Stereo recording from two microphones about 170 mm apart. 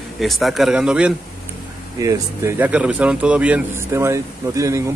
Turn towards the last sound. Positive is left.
turn(degrees=-15)  # may be behind; listen again after turning